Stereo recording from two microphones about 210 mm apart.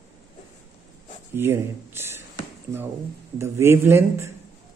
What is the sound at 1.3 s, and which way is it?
Speech, 10° right (ahead or behind).